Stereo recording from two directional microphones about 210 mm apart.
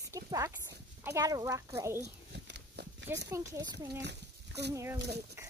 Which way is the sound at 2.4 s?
55° right (ahead or behind).